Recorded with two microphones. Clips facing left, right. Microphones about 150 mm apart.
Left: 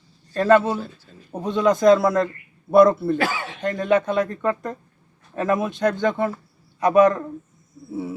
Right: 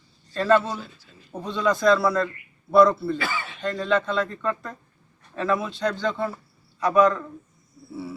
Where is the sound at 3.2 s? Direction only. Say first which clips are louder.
Left 6 dB; 90° left.